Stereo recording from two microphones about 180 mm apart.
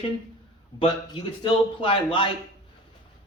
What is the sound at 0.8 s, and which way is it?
A man's voice, 30° left (ahead or behind).